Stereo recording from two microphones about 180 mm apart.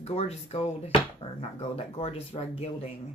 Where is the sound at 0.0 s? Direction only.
35° left (ahead or behind).